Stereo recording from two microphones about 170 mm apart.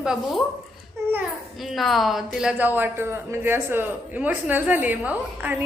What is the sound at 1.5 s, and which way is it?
A woman's voice, centre (ahead or behind).